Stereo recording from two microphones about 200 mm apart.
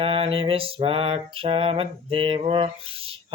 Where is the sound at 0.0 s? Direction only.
25° right (ahead or behind).